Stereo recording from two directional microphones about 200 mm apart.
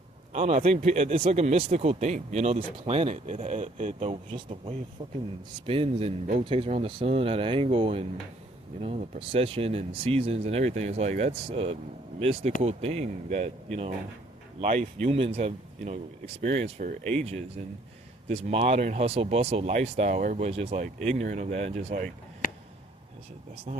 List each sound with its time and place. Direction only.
0.3 s speech: 30° right (ahead or behind)
14.6 s speech: 35° right (ahead or behind)
17.0 s speech: 5° left (ahead or behind)
18.3 s speech: 30° right (ahead or behind)